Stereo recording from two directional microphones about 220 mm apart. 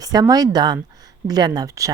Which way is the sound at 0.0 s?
15° right (ahead or behind).